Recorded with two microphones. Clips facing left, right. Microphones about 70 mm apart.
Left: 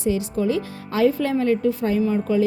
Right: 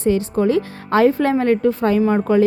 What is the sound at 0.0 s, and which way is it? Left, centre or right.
A woman's voice, right.